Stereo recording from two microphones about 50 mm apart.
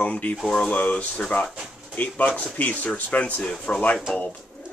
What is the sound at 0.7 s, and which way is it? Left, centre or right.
Speech, left.